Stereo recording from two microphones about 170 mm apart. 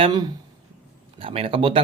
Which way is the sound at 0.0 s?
25° right (ahead or behind).